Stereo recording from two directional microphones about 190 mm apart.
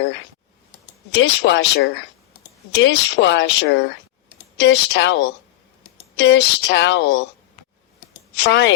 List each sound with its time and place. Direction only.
1.1 s speech: 65° left (ahead or behind)
8.4 s speech: 65° left (ahead or behind)